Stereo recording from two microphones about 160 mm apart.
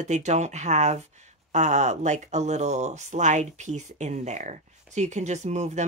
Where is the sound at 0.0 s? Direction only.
45° right (ahead or behind).